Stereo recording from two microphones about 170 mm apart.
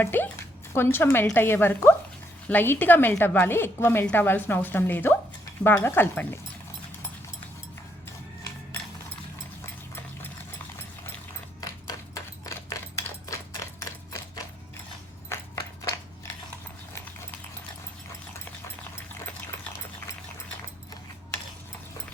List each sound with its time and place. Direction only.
0.0 s a woman's voice: 10° left (ahead or behind)
11.6 s typewriter: 20° left (ahead or behind)
15.8 s a sound: 20° left (ahead or behind)